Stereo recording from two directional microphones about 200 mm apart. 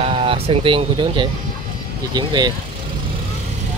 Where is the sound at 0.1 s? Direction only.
30° right (ahead or behind).